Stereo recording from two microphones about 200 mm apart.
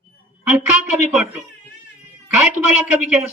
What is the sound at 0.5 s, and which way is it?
Speech, 5° right (ahead or behind).